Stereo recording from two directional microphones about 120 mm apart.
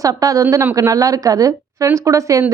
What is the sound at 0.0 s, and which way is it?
A woman's voice, 30° right (ahead or behind).